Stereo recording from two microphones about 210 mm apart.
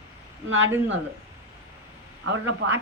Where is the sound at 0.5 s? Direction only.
65° right (ahead or behind).